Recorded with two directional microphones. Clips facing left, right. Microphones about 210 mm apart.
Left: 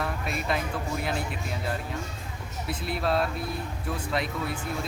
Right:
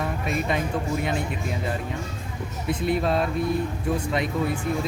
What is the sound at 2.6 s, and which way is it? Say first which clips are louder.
Speech: right 5 dB; 5° left (ahead or behind).